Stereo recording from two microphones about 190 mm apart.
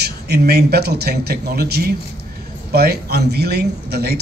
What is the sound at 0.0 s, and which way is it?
A man's voice, 55° right (ahead or behind).